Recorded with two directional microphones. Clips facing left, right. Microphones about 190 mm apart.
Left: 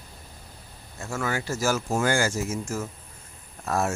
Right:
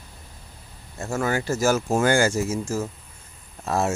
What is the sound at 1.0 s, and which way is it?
Speech, 35° right (ahead or behind).